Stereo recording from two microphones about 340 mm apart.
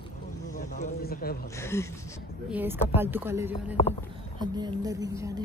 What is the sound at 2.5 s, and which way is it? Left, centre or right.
Speech, centre.